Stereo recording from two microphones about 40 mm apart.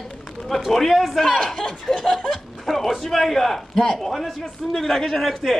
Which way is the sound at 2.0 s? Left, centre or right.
Centre.